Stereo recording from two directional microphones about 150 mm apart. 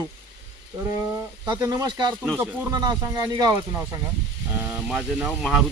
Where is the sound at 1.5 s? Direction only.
20° right (ahead or behind).